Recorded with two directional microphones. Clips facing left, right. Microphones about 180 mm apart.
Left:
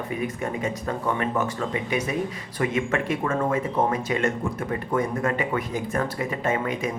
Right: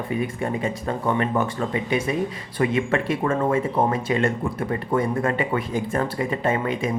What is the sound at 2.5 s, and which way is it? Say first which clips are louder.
Speech: right 3 dB; 30° right (ahead or behind).